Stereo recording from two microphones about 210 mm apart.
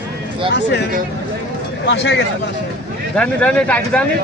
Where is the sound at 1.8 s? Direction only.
55° left (ahead or behind).